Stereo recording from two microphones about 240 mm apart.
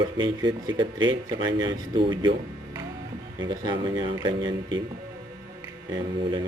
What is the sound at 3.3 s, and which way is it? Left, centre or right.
Speech, centre.